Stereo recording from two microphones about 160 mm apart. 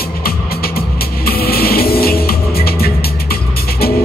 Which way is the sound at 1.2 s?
70° left (ahead or behind).